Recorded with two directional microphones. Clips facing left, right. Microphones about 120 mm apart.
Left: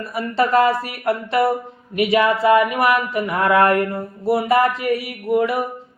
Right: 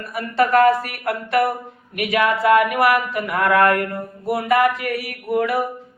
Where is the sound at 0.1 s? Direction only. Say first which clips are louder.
Even; 25° left (ahead or behind).